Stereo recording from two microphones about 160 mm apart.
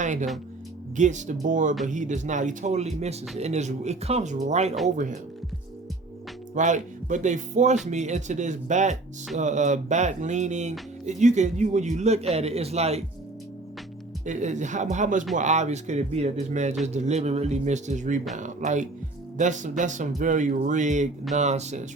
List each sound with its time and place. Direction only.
0.0 s speech: 50° right (ahead or behind)
6.5 s speech: 50° right (ahead or behind)
14.3 s speech: 50° right (ahead or behind)